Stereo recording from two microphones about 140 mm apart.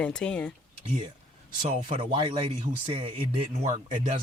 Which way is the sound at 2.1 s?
40° right (ahead or behind).